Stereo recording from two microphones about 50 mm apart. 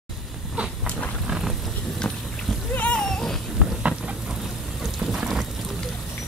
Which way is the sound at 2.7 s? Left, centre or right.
Left.